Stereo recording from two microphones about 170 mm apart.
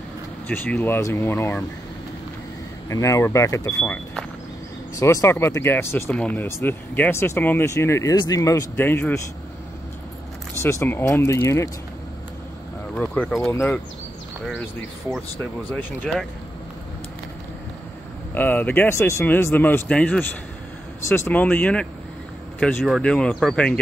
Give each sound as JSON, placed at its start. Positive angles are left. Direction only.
{"t": 0.5, "sound": "speech", "side_deg": 10}
{"t": 2.9, "sound": "speech", "side_deg": 20}
{"t": 4.9, "sound": "speech", "side_deg": 15}
{"t": 10.6, "sound": "speech", "side_deg": 15}
{"t": 12.9, "sound": "speech", "side_deg": 5}
{"t": 13.5, "sound": "speech", "side_deg": 15}
{"t": 15.7, "sound": "speech", "side_deg": 5}
{"t": 18.3, "sound": "speech", "side_deg": 10}